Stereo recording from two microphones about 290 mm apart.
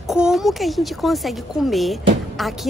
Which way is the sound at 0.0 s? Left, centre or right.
Centre.